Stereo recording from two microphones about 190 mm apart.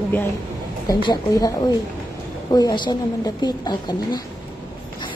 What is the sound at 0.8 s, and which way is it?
Speech, 20° left (ahead or behind).